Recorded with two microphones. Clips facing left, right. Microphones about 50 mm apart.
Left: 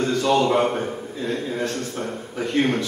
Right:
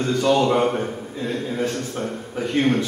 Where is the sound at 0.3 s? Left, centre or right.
Centre.